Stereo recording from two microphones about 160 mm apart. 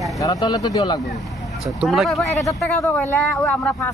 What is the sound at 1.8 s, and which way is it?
Speech, centre (ahead or behind).